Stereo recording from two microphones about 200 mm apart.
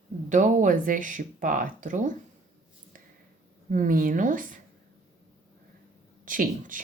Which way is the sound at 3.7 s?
40° right (ahead or behind).